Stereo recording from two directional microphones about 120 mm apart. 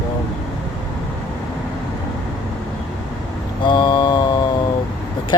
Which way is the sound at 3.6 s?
45° left (ahead or behind).